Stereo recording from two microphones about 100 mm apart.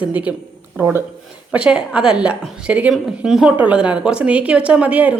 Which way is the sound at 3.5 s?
15° right (ahead or behind).